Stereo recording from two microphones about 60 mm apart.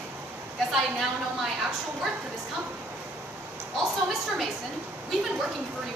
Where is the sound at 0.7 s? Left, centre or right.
Centre.